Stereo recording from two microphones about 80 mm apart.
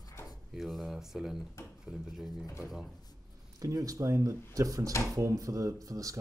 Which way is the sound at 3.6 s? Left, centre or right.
Right.